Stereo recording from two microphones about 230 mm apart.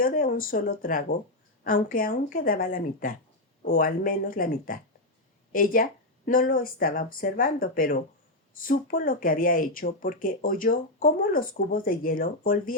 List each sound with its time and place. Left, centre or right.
0.0 s speech: left